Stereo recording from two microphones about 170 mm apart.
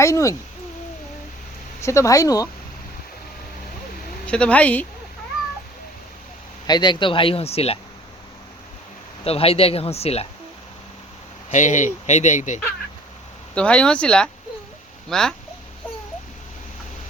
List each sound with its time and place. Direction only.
0.0 s speech: 20° left (ahead or behind)
1.8 s speech: 15° left (ahead or behind)
4.3 s speech: 5° left (ahead or behind)
6.7 s speech: 25° left (ahead or behind)
9.2 s speech: 35° left (ahead or behind)
11.5 s speech: 45° left (ahead or behind)
13.5 s speech: 5° left (ahead or behind)